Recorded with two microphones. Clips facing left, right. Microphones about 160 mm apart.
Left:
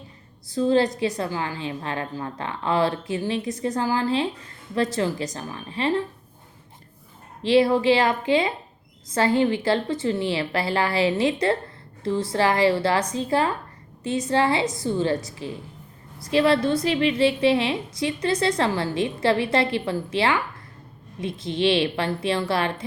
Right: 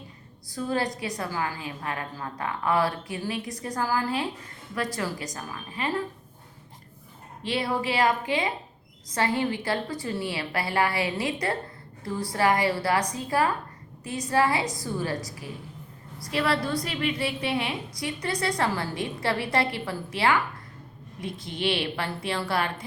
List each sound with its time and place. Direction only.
0.5 s a woman's voice: 25° left (ahead or behind)
7.4 s a woman's voice: 25° left (ahead or behind)